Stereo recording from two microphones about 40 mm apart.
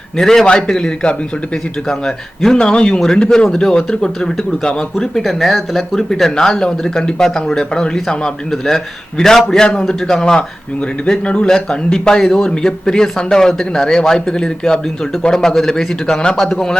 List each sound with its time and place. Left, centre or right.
0.2 s a man's voice: centre
1.9 s a man's voice: centre
5.2 s speech: centre
6.0 s a man's voice: centre
11.4 s a man's voice: centre